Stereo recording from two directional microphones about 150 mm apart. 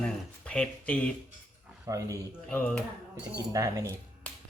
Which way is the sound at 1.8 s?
20° right (ahead or behind).